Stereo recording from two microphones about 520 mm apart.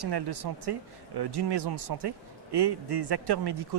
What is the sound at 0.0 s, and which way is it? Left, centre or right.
Speech, right.